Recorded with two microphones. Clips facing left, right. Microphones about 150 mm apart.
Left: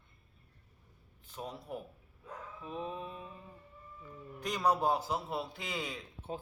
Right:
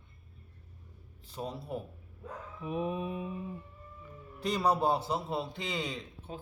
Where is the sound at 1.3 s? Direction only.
35° right (ahead or behind).